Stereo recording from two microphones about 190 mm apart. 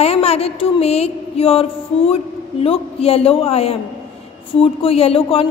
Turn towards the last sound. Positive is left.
turn(degrees=30)  # may be behind; listen again after turning